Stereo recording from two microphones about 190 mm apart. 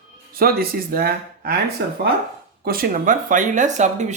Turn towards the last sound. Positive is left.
turn(degrees=-40)  # may be behind; listen again after turning